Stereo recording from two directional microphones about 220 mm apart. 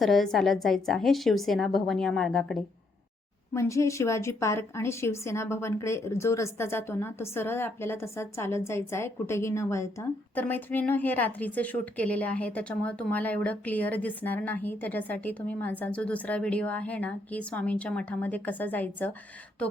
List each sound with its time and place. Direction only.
0.0 s a woman's voice: centre (ahead or behind)
3.5 s a woman's voice: 15° left (ahead or behind)